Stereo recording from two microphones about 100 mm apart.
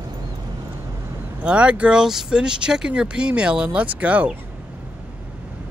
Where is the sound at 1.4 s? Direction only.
10° right (ahead or behind).